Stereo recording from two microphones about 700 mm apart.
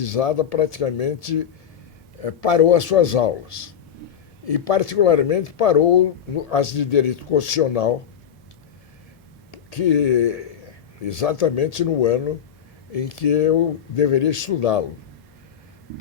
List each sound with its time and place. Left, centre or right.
0.0 s speech: left
9.5 s speech: left